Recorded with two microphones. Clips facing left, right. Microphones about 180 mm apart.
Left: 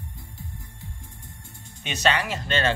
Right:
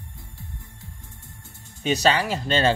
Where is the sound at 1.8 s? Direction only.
35° right (ahead or behind).